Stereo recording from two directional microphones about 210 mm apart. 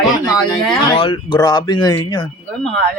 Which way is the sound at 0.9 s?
25° left (ahead or behind).